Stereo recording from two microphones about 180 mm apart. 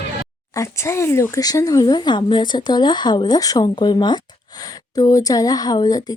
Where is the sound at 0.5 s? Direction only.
15° left (ahead or behind).